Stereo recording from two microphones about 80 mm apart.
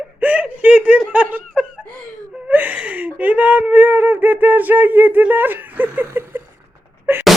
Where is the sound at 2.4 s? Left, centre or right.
Right.